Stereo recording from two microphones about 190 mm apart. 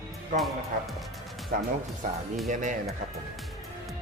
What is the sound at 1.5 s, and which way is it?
A man's voice, 45° right (ahead or behind).